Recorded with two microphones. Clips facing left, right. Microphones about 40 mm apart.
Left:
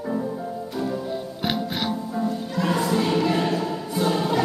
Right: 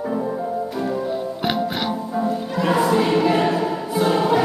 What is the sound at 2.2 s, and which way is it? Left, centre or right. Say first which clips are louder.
Music: right 4 dB; centre.